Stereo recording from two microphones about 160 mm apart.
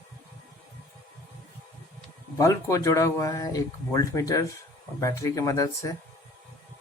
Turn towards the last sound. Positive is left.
turn(degrees=20)  # may be behind; listen again after turning